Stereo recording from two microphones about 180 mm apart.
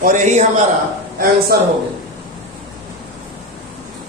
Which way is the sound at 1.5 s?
60° right (ahead or behind).